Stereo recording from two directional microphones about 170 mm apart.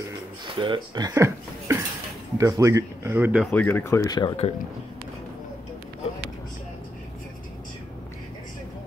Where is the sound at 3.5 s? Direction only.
10° left (ahead or behind).